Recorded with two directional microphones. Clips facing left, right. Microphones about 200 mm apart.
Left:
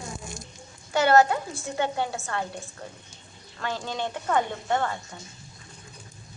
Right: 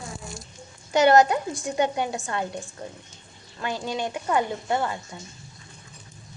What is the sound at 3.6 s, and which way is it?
A woman's voice, 15° right (ahead or behind).